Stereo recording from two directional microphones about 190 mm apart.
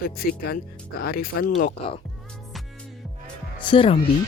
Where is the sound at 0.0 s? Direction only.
55° left (ahead or behind).